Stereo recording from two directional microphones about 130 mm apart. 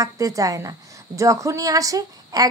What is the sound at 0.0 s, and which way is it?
Speech, 25° right (ahead or behind).